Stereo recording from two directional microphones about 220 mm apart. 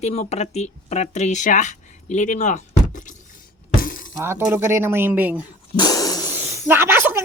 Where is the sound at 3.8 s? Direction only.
40° left (ahead or behind).